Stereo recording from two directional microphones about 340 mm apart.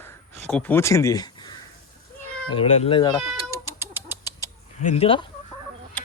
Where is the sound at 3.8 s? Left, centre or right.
Centre.